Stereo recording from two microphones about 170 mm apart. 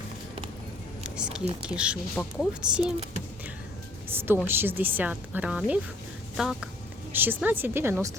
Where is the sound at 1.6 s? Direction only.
5° right (ahead or behind).